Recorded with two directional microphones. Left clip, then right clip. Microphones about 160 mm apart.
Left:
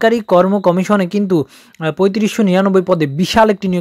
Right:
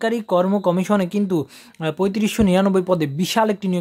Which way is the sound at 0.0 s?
35° left (ahead or behind).